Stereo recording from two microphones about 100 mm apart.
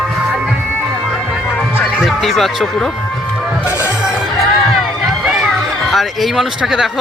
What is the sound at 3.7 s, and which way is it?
Music, 30° left (ahead or behind).